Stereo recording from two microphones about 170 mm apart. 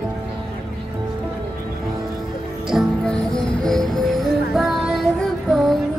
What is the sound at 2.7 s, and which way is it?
Music, centre (ahead or behind).